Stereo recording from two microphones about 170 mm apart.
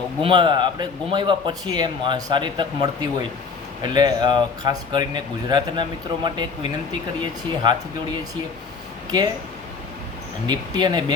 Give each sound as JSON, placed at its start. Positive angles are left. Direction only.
{"t": 0.2, "sound": "speech", "side_deg": -30}
{"t": 10.4, "sound": "speech", "side_deg": -25}